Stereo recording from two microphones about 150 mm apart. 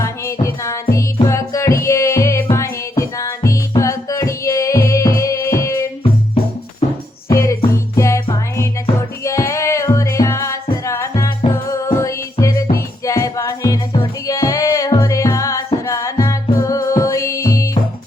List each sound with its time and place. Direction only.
0.0 s music: 20° left (ahead or behind)
7.3 s music: 20° left (ahead or behind)